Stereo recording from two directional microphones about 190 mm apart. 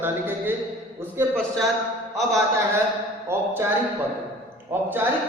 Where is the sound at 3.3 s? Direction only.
15° right (ahead or behind).